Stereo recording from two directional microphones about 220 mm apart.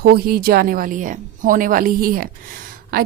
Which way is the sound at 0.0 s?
45° right (ahead or behind).